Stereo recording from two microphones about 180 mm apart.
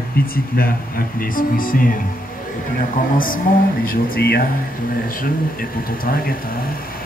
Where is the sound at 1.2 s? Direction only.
50° left (ahead or behind).